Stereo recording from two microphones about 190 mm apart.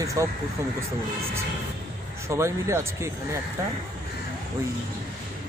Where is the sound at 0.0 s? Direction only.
15° right (ahead or behind).